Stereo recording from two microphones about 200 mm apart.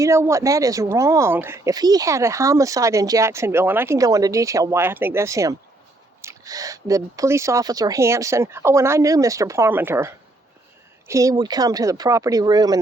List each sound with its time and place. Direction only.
0.0 s speech: 15° right (ahead or behind)